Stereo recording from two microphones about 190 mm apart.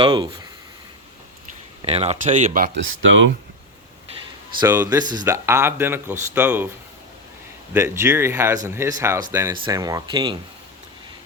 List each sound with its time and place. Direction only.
0.0 s speech: 20° right (ahead or behind)
1.8 s speech: 30° right (ahead or behind)
2.7 s speech: 90° right
4.6 s speech: 15° right (ahead or behind)
7.7 s speech: 15° right (ahead or behind)